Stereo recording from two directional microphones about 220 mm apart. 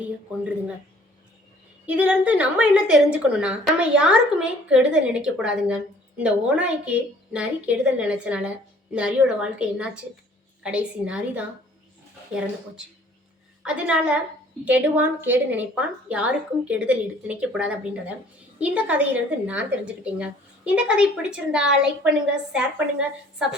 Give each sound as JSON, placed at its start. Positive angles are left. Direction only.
{"t": 1.9, "sound": "a woman's voice", "side_deg": -5}